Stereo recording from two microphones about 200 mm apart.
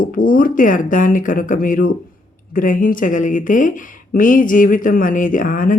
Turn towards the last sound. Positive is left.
turn(degrees=45)  # may be behind; listen again after turning